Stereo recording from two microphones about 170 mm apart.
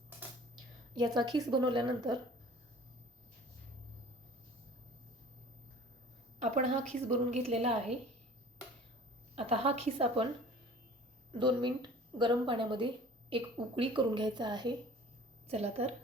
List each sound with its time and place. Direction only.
0.9 s a woman's voice: 25° right (ahead or behind)
6.4 s a sound: 45° right (ahead or behind)
7.4 s a woman's voice: 35° right (ahead or behind)
9.3 s a woman's voice: 35° right (ahead or behind)
11.3 s a woman's voice: 30° right (ahead or behind)
15.4 s a woman's voice: 35° right (ahead or behind)